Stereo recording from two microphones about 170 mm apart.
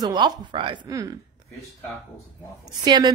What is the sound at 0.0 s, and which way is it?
A woman's voice, 25° right (ahead or behind).